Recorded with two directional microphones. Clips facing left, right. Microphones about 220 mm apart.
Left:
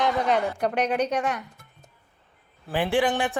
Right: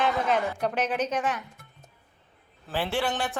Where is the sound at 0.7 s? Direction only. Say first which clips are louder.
Left 3 dB; 5° right (ahead or behind).